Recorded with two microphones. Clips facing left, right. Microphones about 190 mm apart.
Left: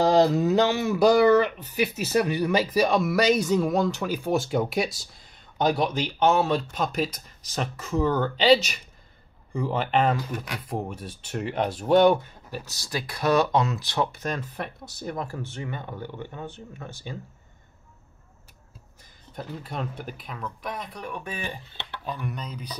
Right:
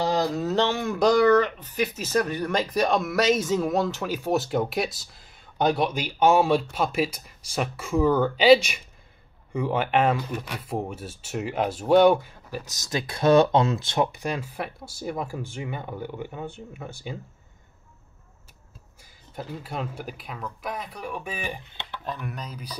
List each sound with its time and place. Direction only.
0.0 s a sound: 35° left (ahead or behind)
0.4 s speech: 10° left (ahead or behind); by 14.0 s 25° right (ahead or behind)
14.0 s speech: 10° right (ahead or behind)
18.9 s speech: 5° right (ahead or behind)
22.0 s speech: centre (ahead or behind)